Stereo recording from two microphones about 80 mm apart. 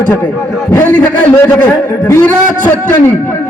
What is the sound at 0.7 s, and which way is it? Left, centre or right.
A man's voice, left.